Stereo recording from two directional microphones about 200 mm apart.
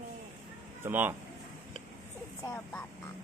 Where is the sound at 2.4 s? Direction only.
10° left (ahead or behind).